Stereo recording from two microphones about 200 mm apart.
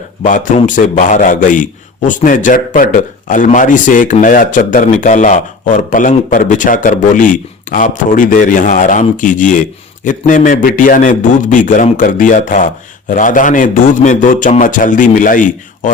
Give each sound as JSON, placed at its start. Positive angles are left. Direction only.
{"t": 0.2, "sound": "a man's voice", "side_deg": 40}